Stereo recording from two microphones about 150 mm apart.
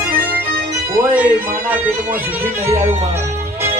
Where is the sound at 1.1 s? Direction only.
10° right (ahead or behind).